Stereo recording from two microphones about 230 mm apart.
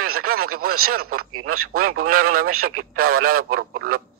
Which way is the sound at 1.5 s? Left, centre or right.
Right.